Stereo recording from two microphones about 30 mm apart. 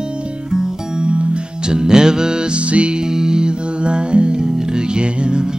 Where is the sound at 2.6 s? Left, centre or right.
Right.